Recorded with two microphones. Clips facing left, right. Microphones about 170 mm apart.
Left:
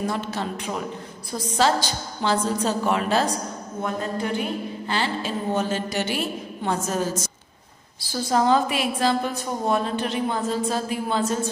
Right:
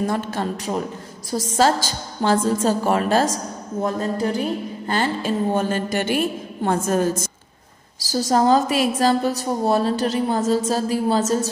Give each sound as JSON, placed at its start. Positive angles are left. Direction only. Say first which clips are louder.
{"t": 0.0, "sound": "a woman's voice", "louder": "right 4 dB", "side_deg": -50}
{"t": 8.1, "sound": "a woman's voice", "louder": "right 3 dB", "side_deg": -40}